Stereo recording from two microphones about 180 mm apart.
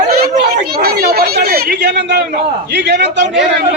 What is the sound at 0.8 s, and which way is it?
A man's voice, 60° right (ahead or behind).